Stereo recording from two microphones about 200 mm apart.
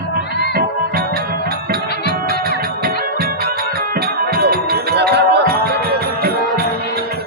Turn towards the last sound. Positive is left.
turn(degrees=-50)  # may be behind; listen again after turning